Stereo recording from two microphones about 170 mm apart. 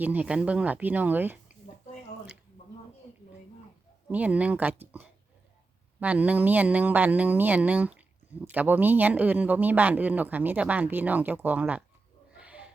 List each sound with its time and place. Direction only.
0.0 s speech: 10° right (ahead or behind)
4.1 s speech: 10° right (ahead or behind)
12.4 s owl: 5° right (ahead or behind)